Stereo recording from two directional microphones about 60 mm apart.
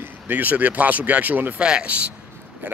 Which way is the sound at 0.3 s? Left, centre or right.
Right.